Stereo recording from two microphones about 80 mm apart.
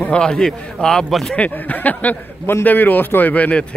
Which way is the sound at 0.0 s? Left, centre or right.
Centre.